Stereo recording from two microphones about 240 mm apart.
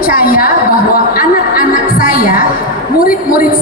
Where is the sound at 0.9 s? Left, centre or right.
Left.